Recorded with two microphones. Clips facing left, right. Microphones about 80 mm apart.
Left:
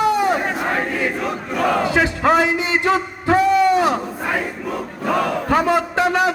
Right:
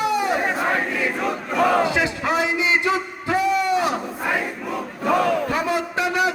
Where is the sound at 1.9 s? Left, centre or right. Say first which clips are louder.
Left 5 dB; left.